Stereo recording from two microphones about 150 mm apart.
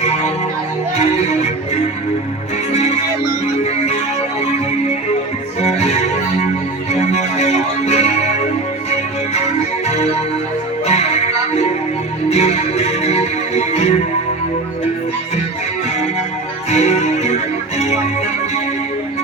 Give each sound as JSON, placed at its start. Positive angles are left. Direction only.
{"t": 2.7, "sound": "music", "side_deg": 45}
{"t": 5.5, "sound": "music", "side_deg": 45}
{"t": 9.8, "sound": "music", "side_deg": 45}
{"t": 16.6, "sound": "music", "side_deg": 45}